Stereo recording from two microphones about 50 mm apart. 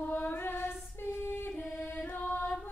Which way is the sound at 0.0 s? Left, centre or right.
Left.